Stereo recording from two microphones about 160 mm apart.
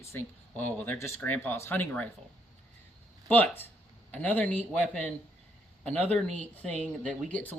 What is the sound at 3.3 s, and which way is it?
Speech, 10° left (ahead or behind).